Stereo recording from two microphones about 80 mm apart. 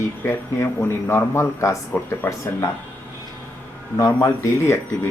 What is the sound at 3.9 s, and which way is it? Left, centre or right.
Speech, left.